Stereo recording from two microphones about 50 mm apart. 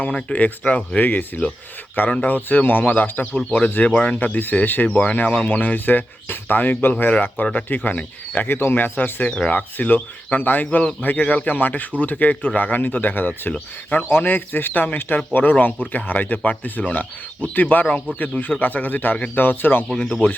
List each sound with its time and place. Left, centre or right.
0.1 s speech: centre
0.3 s speech: left
2.0 s speech: left
2.3 s speech: left
5.5 s speech: left
19.9 s speech: centre